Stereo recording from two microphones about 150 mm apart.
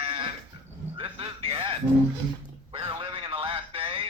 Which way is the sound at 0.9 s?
40° right (ahead or behind).